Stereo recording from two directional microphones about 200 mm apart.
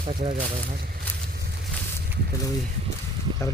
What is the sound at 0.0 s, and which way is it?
Speech, 25° right (ahead or behind).